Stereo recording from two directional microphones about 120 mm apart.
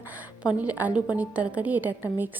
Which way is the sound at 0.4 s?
10° right (ahead or behind).